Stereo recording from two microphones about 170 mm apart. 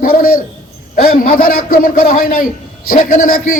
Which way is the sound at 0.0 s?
60° left (ahead or behind).